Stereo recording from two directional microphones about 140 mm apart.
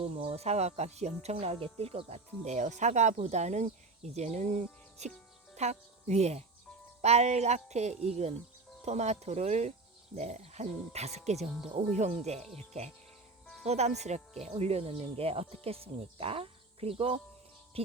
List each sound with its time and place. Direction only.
0.0 s speech: 45° right (ahead or behind)
17.7 s music: 45° right (ahead or behind)